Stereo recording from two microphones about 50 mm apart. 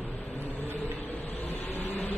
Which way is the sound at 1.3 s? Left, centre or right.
Left.